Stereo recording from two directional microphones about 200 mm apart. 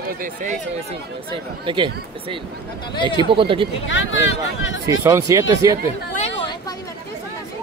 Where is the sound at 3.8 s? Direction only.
70° left (ahead or behind).